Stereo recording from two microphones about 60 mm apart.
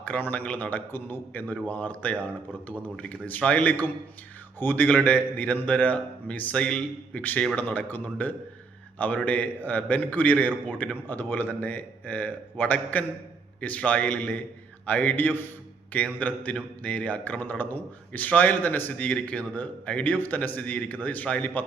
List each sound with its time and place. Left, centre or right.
0.0 s a man's voice: left
0.9 s a man's voice: left; by 7.2 s centre
7.2 s a man's voice: left